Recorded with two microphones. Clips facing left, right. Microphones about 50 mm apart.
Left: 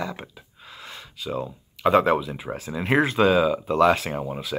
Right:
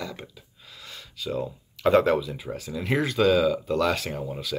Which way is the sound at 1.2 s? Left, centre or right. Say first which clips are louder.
Even; centre.